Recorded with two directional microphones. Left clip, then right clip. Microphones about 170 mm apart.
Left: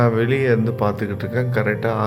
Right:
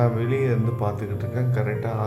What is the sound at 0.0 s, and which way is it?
Speech, 20° left (ahead or behind).